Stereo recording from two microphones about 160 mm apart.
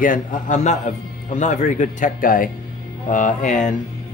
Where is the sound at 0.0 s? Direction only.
55° left (ahead or behind).